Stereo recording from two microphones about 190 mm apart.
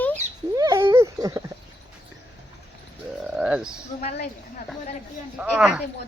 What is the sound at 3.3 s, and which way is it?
Speech, 5° right (ahead or behind).